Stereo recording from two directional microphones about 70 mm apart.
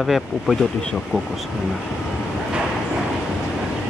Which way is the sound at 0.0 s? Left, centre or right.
Centre.